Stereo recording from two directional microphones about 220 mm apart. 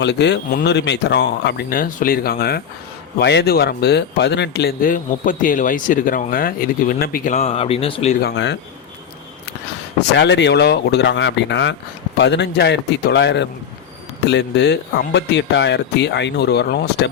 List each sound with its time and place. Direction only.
0.0 s speech: 50° left (ahead or behind); by 8.1 s 25° left (ahead or behind)
8.2 s speech: 50° left (ahead or behind)
10.2 s speech: 50° left (ahead or behind)